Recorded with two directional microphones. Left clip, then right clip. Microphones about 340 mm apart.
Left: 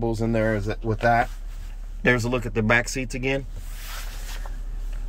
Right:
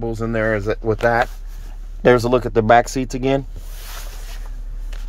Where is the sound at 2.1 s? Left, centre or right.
Right.